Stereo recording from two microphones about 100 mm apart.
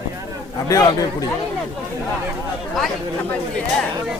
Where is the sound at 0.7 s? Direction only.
35° left (ahead or behind).